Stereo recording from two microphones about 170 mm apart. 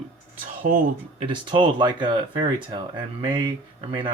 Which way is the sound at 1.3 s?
30° right (ahead or behind).